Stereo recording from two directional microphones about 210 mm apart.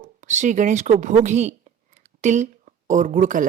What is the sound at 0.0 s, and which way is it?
A woman's voice, 35° right (ahead or behind).